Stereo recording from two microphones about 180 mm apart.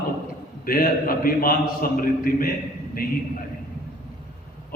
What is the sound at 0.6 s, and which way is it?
A man's voice, 55° left (ahead or behind).